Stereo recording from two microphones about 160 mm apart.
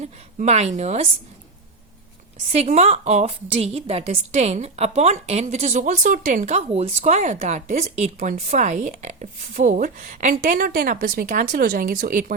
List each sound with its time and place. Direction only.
0.0 s a woman's voice: 45° right (ahead or behind)
2.5 s a woman's voice: 45° right (ahead or behind)